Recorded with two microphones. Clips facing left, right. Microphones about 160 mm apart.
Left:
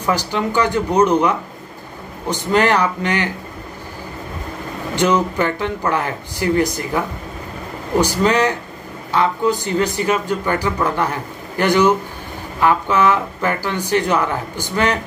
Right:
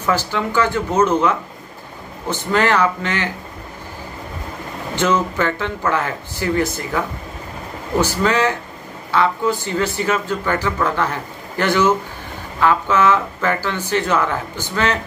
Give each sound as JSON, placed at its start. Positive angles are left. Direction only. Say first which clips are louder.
{"t": 0.0, "sound": "speech", "louder": "left 1 dB", "side_deg": 15}
{"t": 4.9, "sound": "speech", "louder": "left 2 dB", "side_deg": 15}